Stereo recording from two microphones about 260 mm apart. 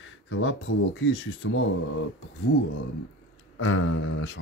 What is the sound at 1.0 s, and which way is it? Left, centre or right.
Speech, left.